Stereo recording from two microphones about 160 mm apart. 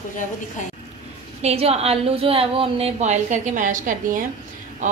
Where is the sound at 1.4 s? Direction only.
40° right (ahead or behind).